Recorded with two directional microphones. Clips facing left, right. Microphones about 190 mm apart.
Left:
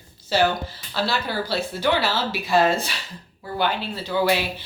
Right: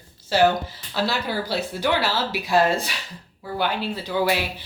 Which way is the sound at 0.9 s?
15° right (ahead or behind).